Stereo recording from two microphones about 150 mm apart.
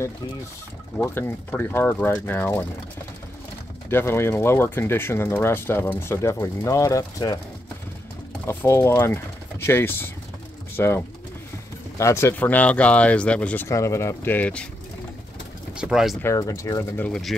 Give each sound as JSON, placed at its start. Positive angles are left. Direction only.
{"t": 0.9, "sound": "speech", "side_deg": 15}
{"t": 3.9, "sound": "speech", "side_deg": 15}
{"t": 8.5, "sound": "speech", "side_deg": 15}
{"t": 13.7, "sound": "speech", "side_deg": 20}
{"t": 15.7, "sound": "speech", "side_deg": -5}
{"t": 16.2, "sound": "speech", "side_deg": 20}
{"t": 16.9, "sound": "speech", "side_deg": 5}